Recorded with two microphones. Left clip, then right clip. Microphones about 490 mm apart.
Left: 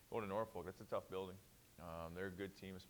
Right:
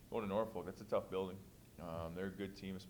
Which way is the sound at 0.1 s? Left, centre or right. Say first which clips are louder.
Right 4 dB; left.